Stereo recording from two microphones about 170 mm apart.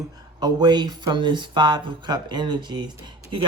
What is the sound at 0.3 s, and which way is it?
Speech, 25° right (ahead or behind).